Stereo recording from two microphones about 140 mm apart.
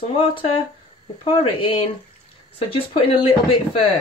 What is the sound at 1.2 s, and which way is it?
Speech, 40° left (ahead or behind).